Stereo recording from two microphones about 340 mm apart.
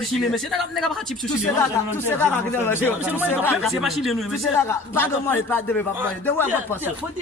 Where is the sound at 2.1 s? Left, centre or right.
Centre.